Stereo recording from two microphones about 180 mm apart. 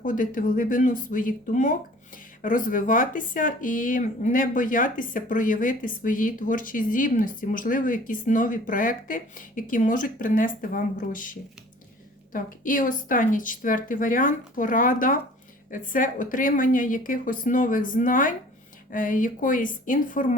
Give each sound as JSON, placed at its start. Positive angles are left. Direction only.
{"t": 0.0, "sound": "speech", "side_deg": 50}